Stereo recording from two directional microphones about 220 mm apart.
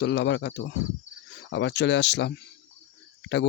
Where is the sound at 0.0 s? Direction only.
55° left (ahead or behind).